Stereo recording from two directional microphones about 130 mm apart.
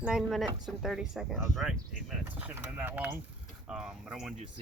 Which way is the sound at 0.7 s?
5° right (ahead or behind).